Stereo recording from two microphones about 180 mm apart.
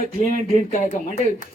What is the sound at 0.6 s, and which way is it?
Speech, 45° left (ahead or behind).